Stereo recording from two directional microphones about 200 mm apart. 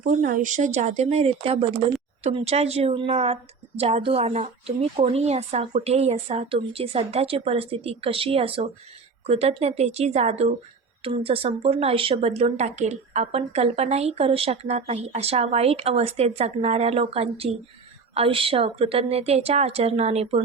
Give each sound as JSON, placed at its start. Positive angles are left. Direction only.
{"t": 0.0, "sound": "speech", "side_deg": -40}